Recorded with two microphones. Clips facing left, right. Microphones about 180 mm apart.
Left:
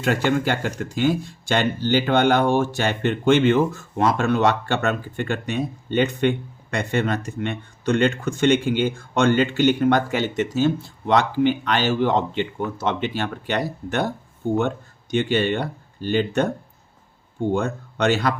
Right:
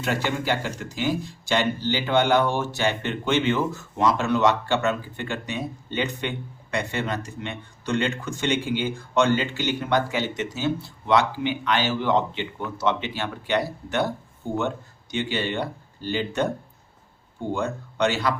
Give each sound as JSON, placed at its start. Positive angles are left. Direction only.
{"t": 0.0, "sound": "speech", "side_deg": 55}
{"t": 15.1, "sound": "speech", "side_deg": 55}
{"t": 17.5, "sound": "speech", "side_deg": 50}